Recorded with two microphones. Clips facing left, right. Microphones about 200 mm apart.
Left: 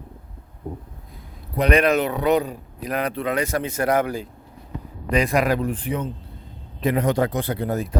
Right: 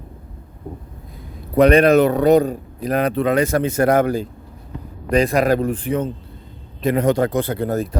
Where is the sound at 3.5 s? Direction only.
45° right (ahead or behind).